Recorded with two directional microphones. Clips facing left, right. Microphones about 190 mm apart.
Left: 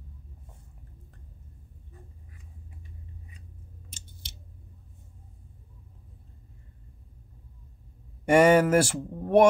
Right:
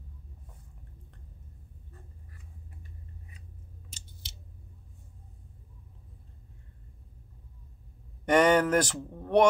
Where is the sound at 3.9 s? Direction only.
50° left (ahead or behind).